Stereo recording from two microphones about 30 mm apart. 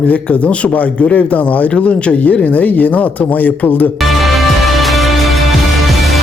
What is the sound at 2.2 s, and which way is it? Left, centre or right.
Speech, left.